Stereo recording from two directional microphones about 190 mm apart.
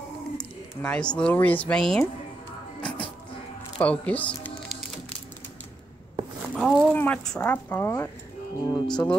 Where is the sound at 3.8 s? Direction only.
10° left (ahead or behind).